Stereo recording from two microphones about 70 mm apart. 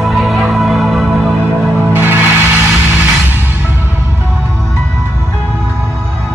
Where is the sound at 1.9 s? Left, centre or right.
Right.